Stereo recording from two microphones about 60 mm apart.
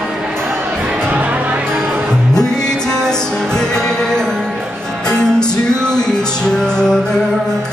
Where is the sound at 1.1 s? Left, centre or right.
Right.